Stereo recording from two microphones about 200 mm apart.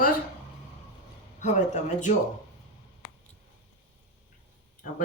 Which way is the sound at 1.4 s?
35° left (ahead or behind).